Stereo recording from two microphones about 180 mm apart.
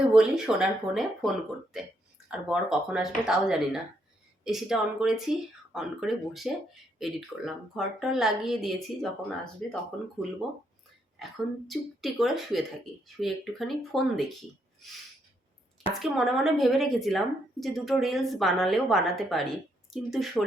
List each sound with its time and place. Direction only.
0.0 s a woman's voice: 5° right (ahead or behind)
11.7 s a woman's voice: centre (ahead or behind)
15.9 s a woman's voice: centre (ahead or behind)